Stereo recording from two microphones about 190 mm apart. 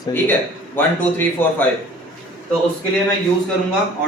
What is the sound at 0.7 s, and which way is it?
Speech, 10° left (ahead or behind).